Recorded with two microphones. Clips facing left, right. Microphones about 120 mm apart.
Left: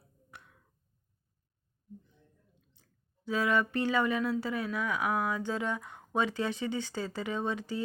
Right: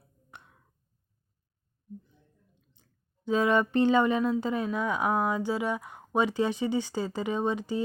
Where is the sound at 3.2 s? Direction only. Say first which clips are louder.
Right 5 dB; 25° right (ahead or behind).